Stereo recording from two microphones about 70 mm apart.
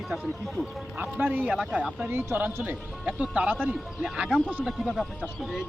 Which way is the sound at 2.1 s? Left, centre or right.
Right.